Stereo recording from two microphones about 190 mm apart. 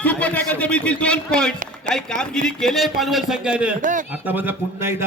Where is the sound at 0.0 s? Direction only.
5° left (ahead or behind).